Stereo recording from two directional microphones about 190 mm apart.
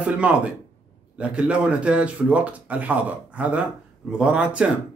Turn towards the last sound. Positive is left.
turn(degrees=-5)  # may be behind; listen again after turning